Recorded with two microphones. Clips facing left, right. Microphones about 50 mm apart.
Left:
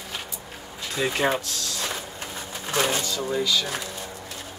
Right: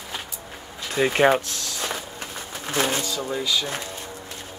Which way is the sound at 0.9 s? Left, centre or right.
Right.